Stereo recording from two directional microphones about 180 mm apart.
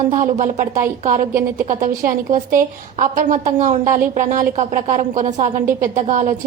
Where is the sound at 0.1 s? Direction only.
40° right (ahead or behind).